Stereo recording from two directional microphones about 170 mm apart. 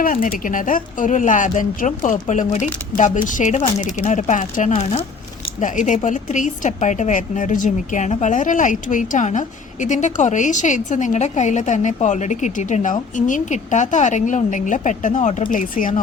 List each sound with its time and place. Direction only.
0.0 s a woman's voice: 55° left (ahead or behind)